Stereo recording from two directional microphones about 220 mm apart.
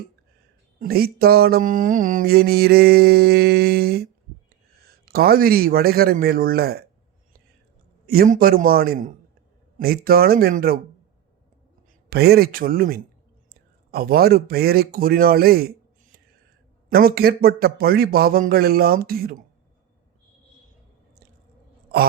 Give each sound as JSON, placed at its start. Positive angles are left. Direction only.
{"t": 0.8, "sound": "mantra", "side_deg": -45}
{"t": 8.0, "sound": "mantra", "side_deg": -45}
{"t": 8.6, "sound": "speech", "side_deg": -45}
{"t": 9.7, "sound": "mantra", "side_deg": -45}
{"t": 12.1, "sound": "a man's voice", "side_deg": -45}
{"t": 16.9, "sound": "mantra", "side_deg": -45}